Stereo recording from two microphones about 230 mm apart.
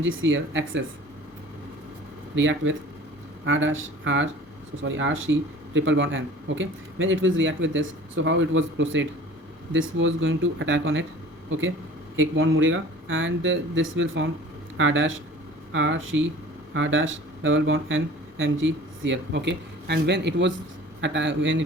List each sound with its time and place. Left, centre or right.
0.0 s a man's voice: right
2.3 s a man's voice: right
12.1 s a man's voice: right